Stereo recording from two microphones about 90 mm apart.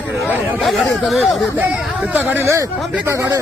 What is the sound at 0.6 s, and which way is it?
Speech, centre (ahead or behind).